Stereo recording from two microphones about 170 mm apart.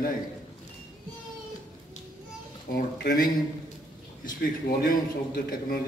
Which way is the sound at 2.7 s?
65° left (ahead or behind).